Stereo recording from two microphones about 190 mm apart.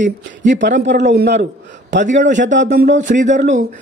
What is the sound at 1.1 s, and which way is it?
Speech, 60° right (ahead or behind).